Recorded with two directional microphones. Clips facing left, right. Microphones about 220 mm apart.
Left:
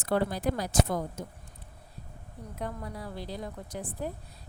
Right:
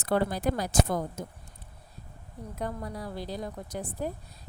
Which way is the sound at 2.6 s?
40° right (ahead or behind).